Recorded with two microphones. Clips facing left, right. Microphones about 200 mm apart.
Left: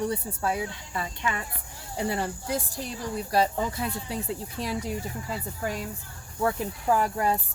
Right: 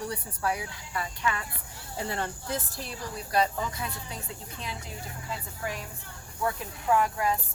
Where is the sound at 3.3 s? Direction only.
30° left (ahead or behind).